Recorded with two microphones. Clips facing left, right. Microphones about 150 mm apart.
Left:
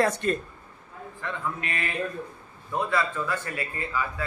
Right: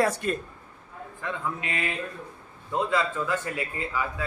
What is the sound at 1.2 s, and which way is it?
A woman's voice, 15° right (ahead or behind).